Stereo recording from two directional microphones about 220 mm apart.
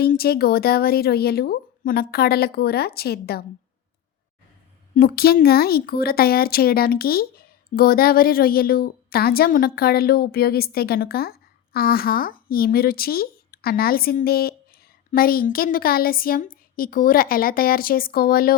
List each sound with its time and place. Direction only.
0.0 s speech: 45° left (ahead or behind)
4.9 s a woman's voice: 45° left (ahead or behind)